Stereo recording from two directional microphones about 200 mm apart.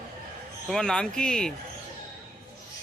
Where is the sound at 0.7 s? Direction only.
5° left (ahead or behind).